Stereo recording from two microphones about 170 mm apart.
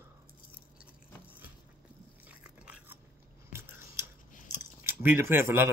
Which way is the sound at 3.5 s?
15° right (ahead or behind).